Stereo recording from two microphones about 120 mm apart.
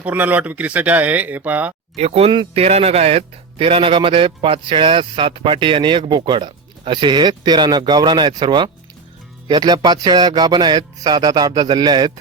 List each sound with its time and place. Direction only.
0.0 s speech: 15° right (ahead or behind)
2.0 s a man's voice: 60° right (ahead or behind); by 12.1 s 35° right (ahead or behind)